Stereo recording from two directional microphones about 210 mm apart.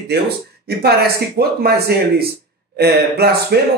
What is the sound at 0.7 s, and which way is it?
Speech, 50° right (ahead or behind).